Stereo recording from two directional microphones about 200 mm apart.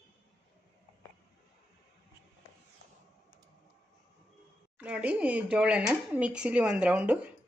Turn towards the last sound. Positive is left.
turn(degrees=-5)  # may be behind; listen again after turning